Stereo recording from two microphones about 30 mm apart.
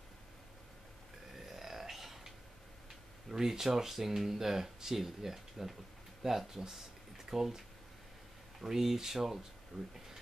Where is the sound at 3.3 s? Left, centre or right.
Centre.